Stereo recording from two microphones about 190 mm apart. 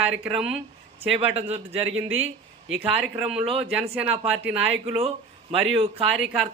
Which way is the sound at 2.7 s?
5° right (ahead or behind).